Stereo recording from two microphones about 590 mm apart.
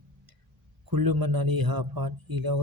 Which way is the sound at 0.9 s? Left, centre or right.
Right.